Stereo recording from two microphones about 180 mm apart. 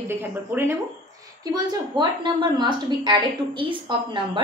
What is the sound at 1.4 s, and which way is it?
A woman's voice, 20° right (ahead or behind).